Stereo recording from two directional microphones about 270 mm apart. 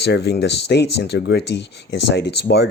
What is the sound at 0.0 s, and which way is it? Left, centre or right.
Speech, left.